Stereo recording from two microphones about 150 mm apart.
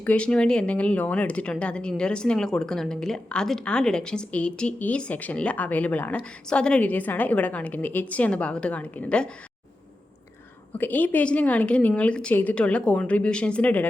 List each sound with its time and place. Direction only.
0.0 s speech: 10° left (ahead or behind)
10.8 s speech: 10° left (ahead or behind)